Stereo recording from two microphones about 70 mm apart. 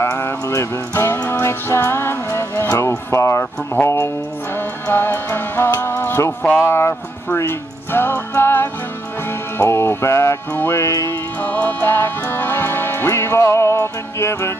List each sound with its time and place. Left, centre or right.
0.0 s music: left
2.7 s speech: left
3.8 s music: left
10.8 s speech: left
11.1 s music: left